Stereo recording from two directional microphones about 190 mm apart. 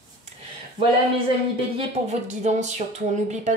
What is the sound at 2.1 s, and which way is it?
Speech, 40° right (ahead or behind).